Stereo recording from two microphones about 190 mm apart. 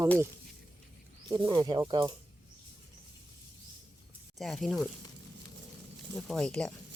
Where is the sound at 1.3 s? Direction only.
25° right (ahead or behind).